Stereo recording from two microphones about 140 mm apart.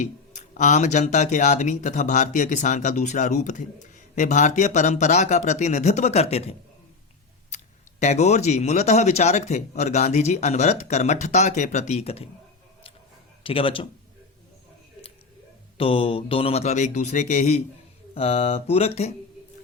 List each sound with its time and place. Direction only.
0.0 s speech: 60° left (ahead or behind)
13.4 s speech: 40° left (ahead or behind)
15.8 s speech: 40° left (ahead or behind)